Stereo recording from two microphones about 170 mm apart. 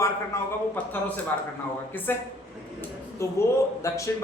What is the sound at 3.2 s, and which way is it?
Speech, 15° left (ahead or behind).